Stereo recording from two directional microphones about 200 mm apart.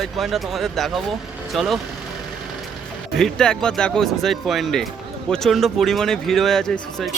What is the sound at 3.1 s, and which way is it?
Speech, centre (ahead or behind).